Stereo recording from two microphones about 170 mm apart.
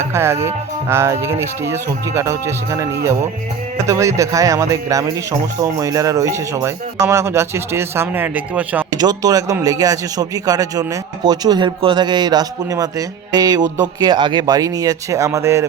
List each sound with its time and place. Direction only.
0.0 s a man's voice: 15° right (ahead or behind)
9.0 s a man's voice: 20° right (ahead or behind)